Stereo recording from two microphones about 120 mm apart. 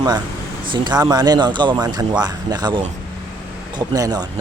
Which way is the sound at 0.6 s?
40° right (ahead or behind).